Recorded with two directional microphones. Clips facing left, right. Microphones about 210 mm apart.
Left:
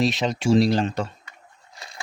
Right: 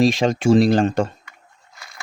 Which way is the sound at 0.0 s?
50° right (ahead or behind).